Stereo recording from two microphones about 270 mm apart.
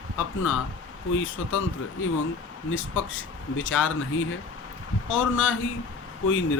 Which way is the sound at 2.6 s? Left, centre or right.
Left.